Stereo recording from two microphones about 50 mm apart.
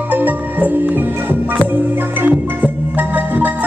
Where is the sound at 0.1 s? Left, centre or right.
Right.